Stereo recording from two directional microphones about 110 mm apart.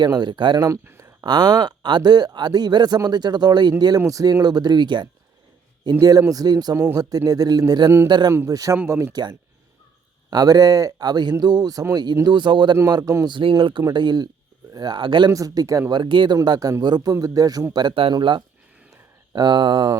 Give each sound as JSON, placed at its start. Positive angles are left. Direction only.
{"t": 0.0, "sound": "speech", "side_deg": -40}
{"t": 0.7, "sound": "speech", "side_deg": -20}
{"t": 1.2, "sound": "speech", "side_deg": -40}
{"t": 8.3, "sound": "speech", "side_deg": -30}
{"t": 10.2, "sound": "speech", "side_deg": -35}
{"t": 15.3, "sound": "speech", "side_deg": -30}
{"t": 15.9, "sound": "speech", "side_deg": -45}